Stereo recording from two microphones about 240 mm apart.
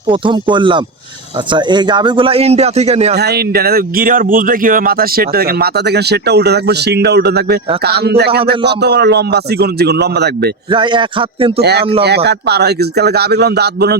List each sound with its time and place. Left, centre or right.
0.1 s speech: centre
3.2 s a man's voice: right
10.7 s speech: right
11.6 s a man's voice: right